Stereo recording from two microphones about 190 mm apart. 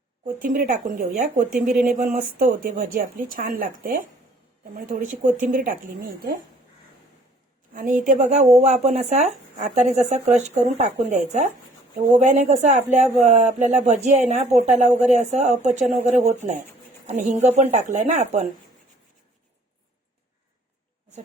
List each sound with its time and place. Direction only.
0.3 s a woman's voice: 45° right (ahead or behind)
1.5 s speech: 5° right (ahead or behind)
2.0 s a woman's voice: 45° right (ahead or behind)
7.7 s a woman's voice: 45° right (ahead or behind)